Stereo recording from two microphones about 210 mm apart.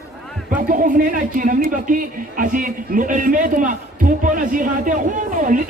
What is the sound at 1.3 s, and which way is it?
A man's voice, 40° right (ahead or behind).